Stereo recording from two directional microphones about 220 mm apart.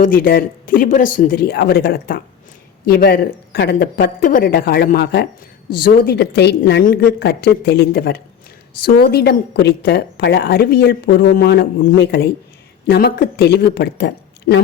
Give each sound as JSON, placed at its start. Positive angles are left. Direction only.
{"t": 0.0, "sound": "a woman's voice", "side_deg": 40}